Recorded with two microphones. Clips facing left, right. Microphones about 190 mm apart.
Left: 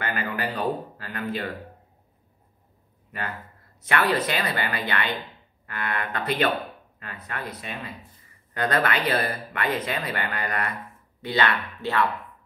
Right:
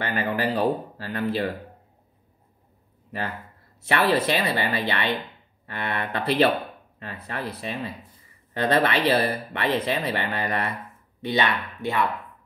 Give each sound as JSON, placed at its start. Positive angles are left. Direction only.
{"t": 0.1, "sound": "speech", "side_deg": -30}
{"t": 3.9, "sound": "speech", "side_deg": -20}